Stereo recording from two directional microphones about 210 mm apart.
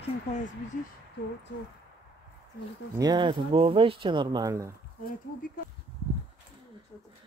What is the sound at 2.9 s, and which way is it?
Speech, 20° right (ahead or behind).